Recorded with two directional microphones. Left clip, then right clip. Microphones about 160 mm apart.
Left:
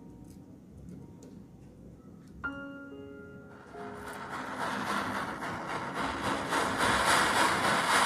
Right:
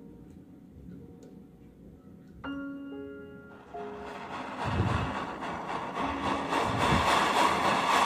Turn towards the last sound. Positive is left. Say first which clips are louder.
# right 1 dB
turn(degrees=-20)  # may be behind; listen again after turning